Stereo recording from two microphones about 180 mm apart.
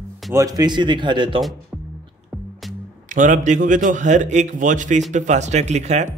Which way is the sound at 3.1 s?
45° right (ahead or behind).